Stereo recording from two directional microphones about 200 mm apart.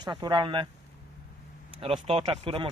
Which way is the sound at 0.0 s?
20° right (ahead or behind).